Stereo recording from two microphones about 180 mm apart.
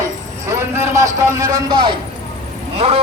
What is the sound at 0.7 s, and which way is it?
A man's voice, 15° right (ahead or behind).